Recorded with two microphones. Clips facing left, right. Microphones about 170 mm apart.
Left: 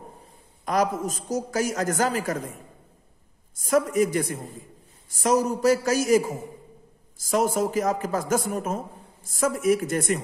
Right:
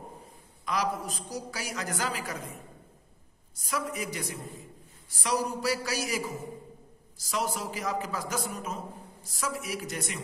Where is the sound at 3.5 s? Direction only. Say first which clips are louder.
Left 12 dB; 50° left (ahead or behind).